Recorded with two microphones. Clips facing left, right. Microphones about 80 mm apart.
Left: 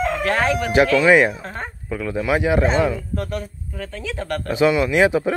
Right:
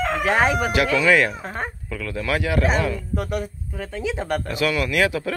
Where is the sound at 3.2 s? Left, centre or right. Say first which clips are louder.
Right 1 dB; centre.